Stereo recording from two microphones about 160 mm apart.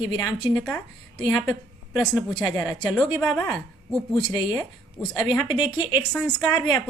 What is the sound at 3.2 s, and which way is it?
A woman's voice, 10° left (ahead or behind).